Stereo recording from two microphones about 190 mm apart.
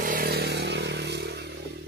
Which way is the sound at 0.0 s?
50° right (ahead or behind).